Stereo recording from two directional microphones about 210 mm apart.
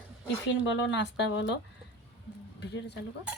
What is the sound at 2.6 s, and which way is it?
Speech, 55° left (ahead or behind).